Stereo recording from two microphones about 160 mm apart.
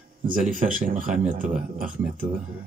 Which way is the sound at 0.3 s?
55° right (ahead or behind).